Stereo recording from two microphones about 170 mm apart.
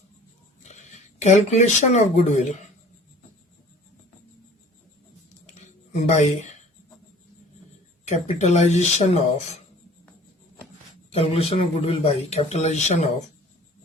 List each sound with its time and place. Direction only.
0.6 s speech: 45° left (ahead or behind)
5.5 s a sound: 40° left (ahead or behind)
8.0 s a man's voice: 40° left (ahead or behind)
11.1 s a man's voice: 35° left (ahead or behind)